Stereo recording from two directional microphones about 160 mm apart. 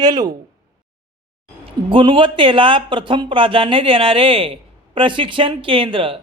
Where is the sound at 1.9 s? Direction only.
30° right (ahead or behind).